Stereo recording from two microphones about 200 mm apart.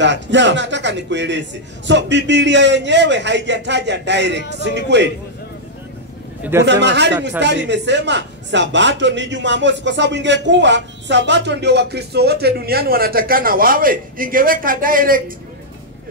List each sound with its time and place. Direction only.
0.0 s speech: 65° right (ahead or behind)
6.6 s speech: 60° right (ahead or behind); by 15.3 s 45° right (ahead or behind)